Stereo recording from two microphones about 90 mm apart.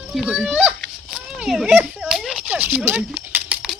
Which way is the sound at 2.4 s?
20° right (ahead or behind).